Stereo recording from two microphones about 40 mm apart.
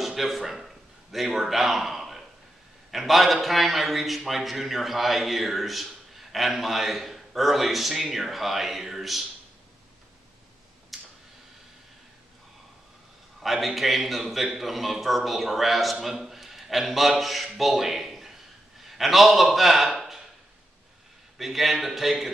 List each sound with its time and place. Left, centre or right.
0.0 s a sound: centre
1.1 s a man's voice: centre
10.9 s tick-tock: centre
13.4 s a man's voice: centre
21.4 s a man's voice: centre